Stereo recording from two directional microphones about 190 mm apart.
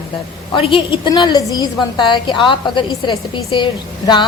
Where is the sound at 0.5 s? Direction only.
25° left (ahead or behind).